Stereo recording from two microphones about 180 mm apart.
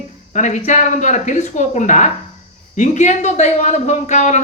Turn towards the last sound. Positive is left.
turn(degrees=40)  # may be behind; listen again after turning